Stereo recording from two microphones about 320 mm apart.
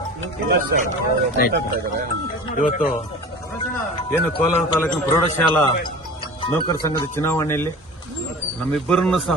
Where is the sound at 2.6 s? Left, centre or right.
Left.